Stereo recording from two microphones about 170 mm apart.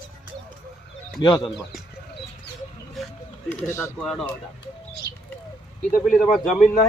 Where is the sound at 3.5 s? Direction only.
15° left (ahead or behind).